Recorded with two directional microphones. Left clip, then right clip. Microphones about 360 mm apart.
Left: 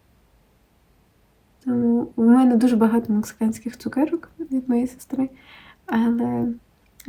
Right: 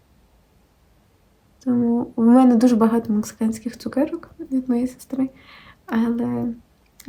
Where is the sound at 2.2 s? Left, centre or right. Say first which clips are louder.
Right 3 dB; centre.